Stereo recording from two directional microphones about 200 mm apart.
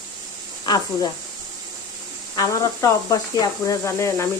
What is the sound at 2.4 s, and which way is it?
Speech, 15° left (ahead or behind).